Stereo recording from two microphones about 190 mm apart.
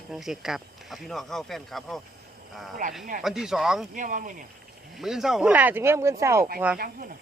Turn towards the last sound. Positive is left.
turn(degrees=-50)  # may be behind; listen again after turning